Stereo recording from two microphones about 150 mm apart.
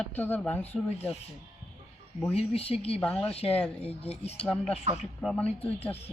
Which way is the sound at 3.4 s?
40° left (ahead or behind).